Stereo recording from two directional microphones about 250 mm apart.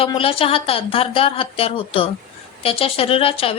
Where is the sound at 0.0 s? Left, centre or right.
Left.